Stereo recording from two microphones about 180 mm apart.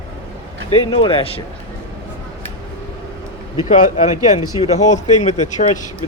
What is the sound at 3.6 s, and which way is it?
Speech, 45° left (ahead or behind).